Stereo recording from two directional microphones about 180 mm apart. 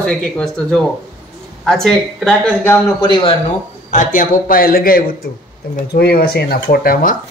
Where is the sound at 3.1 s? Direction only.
25° left (ahead or behind).